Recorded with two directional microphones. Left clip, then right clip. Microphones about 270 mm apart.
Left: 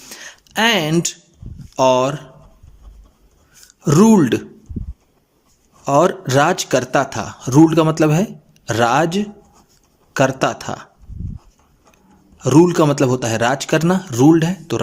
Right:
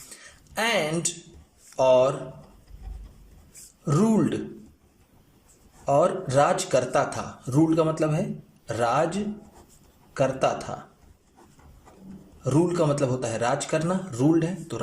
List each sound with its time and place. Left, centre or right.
0.1 s a sound: left
1.7 s speech: left
3.8 s speech: left
5.8 s speech: left
12.4 s speech: left